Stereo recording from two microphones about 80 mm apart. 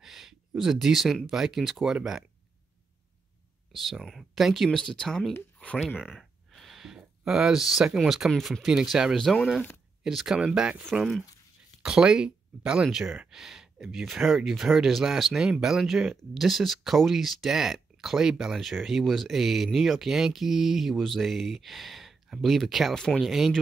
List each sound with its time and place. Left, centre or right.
0.0 s a sound: centre
0.6 s speech: centre
3.7 s speech: centre
4.6 s speech: centre
5.9 s speech: centre
6.5 s speech: centre
11.8 s speech: centre